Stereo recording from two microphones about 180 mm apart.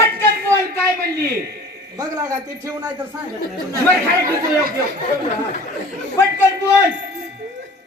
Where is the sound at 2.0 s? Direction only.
20° right (ahead or behind).